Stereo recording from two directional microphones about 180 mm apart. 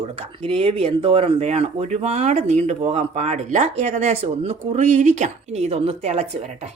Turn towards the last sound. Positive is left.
turn(degrees=-35)  # may be behind; listen again after turning